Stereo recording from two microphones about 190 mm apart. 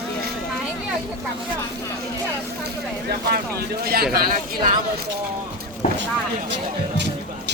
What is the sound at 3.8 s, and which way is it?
Speech, 55° right (ahead or behind).